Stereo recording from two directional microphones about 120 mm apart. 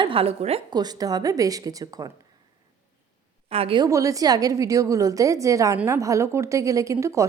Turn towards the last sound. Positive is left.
turn(degrees=-25)  # may be behind; listen again after turning